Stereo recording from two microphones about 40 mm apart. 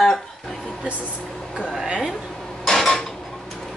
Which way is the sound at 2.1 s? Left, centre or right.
Centre.